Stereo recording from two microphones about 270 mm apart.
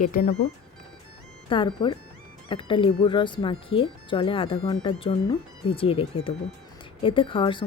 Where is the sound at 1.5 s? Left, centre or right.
Centre.